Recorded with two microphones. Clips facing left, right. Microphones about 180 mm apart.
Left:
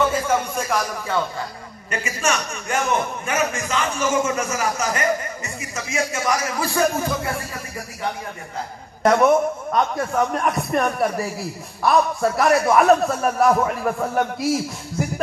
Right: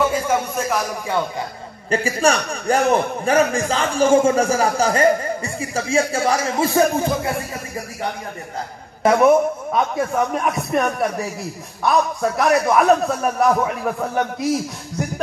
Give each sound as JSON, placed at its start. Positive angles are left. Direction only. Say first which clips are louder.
{"t": 0.0, "sound": "speech", "louder": "right 1 dB", "side_deg": -5}
{"t": 1.9, "sound": "a man's voice", "louder": "right 6 dB", "side_deg": -30}
{"t": 9.0, "sound": "a man's voice", "louder": "right 2 dB", "side_deg": -5}